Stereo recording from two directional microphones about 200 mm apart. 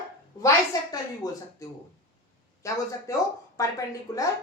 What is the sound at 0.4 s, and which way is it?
A woman's voice, 15° left (ahead or behind).